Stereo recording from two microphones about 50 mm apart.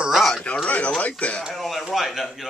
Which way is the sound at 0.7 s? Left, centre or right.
Left.